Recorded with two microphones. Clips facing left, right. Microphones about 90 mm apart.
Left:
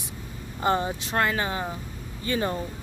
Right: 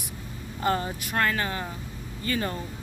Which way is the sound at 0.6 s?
25° left (ahead or behind).